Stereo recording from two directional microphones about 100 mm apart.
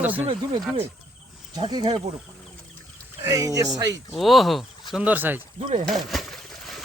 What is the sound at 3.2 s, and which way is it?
Speech, 35° right (ahead or behind).